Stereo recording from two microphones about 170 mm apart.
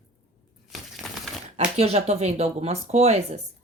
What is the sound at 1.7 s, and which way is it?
Speech, 40° right (ahead or behind).